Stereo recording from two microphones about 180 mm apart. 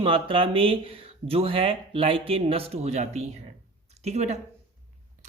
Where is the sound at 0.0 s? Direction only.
30° right (ahead or behind).